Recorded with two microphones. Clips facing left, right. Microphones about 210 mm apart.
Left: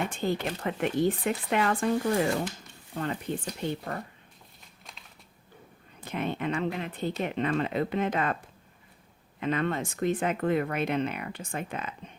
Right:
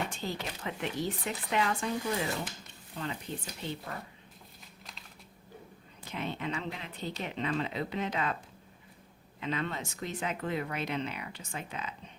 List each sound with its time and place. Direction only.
0.1 s speech: 55° left (ahead or behind)
6.1 s speech: 55° left (ahead or behind)
9.4 s speech: 55° left (ahead or behind)